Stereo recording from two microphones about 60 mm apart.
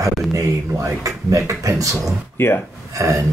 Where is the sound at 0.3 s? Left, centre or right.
Right.